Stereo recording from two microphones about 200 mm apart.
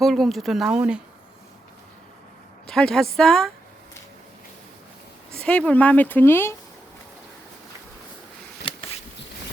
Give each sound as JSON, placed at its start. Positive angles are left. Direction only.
{"t": 0.0, "sound": "speech", "side_deg": 0}
{"t": 2.6, "sound": "a woman's voice", "side_deg": 5}
{"t": 5.3, "sound": "speech", "side_deg": 5}
{"t": 8.7, "sound": "a sound", "side_deg": 25}